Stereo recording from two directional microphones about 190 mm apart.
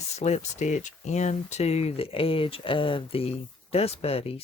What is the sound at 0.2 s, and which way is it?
Speech, 35° left (ahead or behind).